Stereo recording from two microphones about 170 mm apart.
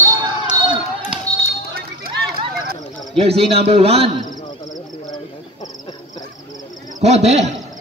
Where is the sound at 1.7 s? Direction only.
65° right (ahead or behind).